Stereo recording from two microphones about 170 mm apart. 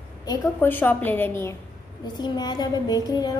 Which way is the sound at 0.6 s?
10° left (ahead or behind).